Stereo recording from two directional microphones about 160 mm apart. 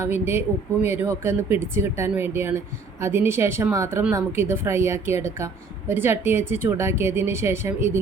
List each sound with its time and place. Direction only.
0.0 s speech: 15° right (ahead or behind)